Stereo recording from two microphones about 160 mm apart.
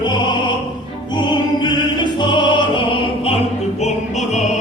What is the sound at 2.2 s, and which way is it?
Music, 30° left (ahead or behind).